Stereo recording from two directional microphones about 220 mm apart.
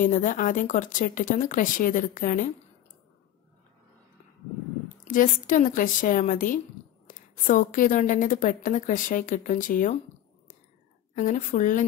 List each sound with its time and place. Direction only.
0.0 s a woman's voice: 35° left (ahead or behind)
5.0 s a woman's voice: 35° left (ahead or behind)
11.1 s a woman's voice: 35° left (ahead or behind)